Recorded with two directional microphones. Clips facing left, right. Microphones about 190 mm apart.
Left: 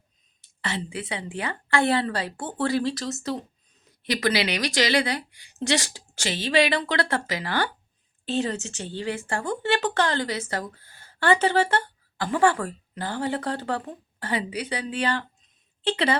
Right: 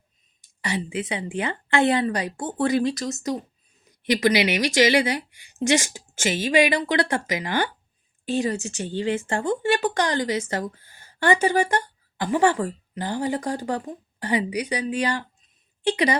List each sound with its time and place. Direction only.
0.6 s speech: 15° right (ahead or behind)